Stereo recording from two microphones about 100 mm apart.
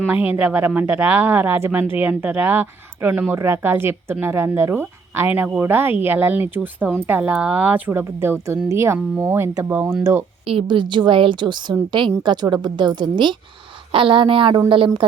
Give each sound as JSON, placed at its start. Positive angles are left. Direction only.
{"t": 0.0, "sound": "speech", "side_deg": -15}
{"t": 10.4, "sound": "a woman's voice", "side_deg": -60}